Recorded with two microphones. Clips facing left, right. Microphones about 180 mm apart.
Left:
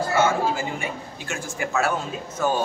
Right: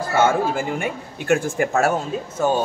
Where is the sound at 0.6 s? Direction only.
60° right (ahead or behind).